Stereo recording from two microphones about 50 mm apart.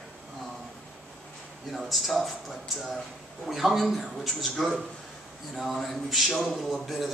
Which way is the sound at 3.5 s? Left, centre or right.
Centre.